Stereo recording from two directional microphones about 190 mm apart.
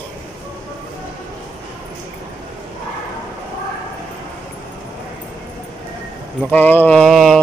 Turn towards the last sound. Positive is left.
turn(degrees=0)  # may be behind; listen again after turning